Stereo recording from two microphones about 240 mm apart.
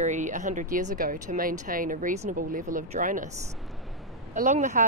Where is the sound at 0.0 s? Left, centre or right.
Right.